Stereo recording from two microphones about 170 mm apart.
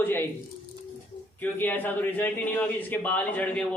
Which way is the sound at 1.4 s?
10° left (ahead or behind).